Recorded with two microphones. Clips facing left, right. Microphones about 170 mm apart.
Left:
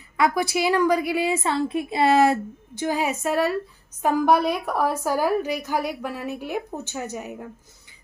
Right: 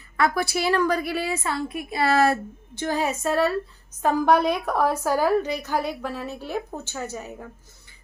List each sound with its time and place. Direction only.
0.2 s a woman's voice: 15° left (ahead or behind)